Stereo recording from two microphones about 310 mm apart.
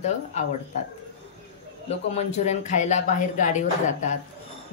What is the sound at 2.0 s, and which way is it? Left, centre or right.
Speech, left.